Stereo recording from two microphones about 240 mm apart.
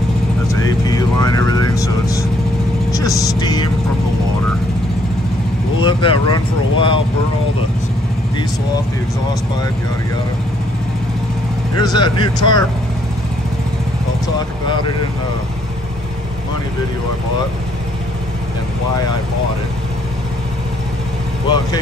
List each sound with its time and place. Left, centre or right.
0.5 s vehicle: centre
5.8 s a sound: left
11.8 s speech: centre